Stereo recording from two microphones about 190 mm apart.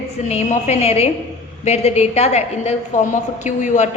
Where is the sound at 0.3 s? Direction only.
35° left (ahead or behind).